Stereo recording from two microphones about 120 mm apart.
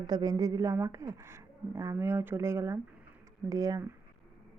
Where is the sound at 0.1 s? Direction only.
35° right (ahead or behind).